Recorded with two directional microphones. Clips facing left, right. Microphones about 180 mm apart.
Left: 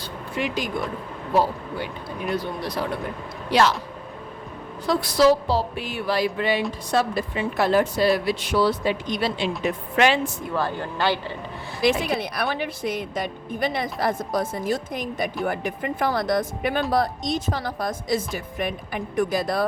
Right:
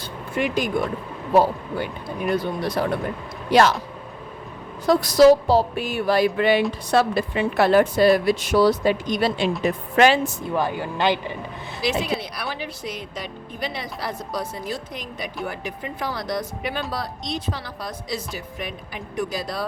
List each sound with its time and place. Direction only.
0.3 s a woman's voice: 50° right (ahead or behind)
2.3 s a woman's voice: 50° right (ahead or behind)
4.9 s a woman's voice: 45° right (ahead or behind)
10.5 s speech: 15° right (ahead or behind)
11.8 s a woman's voice: 55° left (ahead or behind)